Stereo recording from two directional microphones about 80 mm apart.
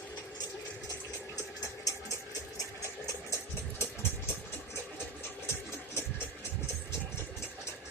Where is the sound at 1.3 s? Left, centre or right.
Left.